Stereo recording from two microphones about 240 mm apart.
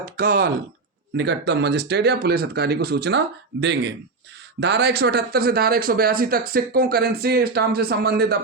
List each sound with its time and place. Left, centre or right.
0.0 s speech: right